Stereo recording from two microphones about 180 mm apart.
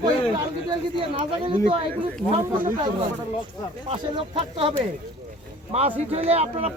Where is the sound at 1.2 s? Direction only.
30° right (ahead or behind).